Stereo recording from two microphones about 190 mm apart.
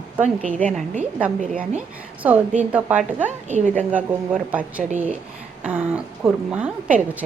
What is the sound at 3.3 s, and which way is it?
Speech, 40° right (ahead or behind).